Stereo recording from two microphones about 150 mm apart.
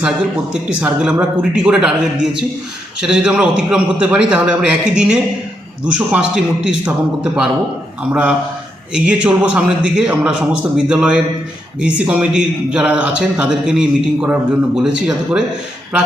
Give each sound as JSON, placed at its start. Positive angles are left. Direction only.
{"t": 0.0, "sound": "a man's voice", "side_deg": -5}